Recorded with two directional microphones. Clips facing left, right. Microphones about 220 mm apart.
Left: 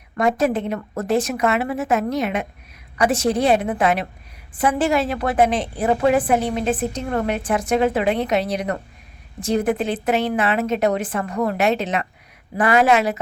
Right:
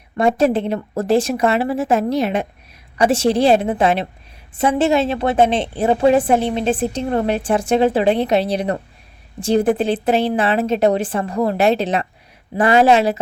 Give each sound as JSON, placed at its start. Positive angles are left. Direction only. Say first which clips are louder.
{"t": 0.2, "sound": "a woman's voice", "louder": "right 4 dB", "side_deg": -30}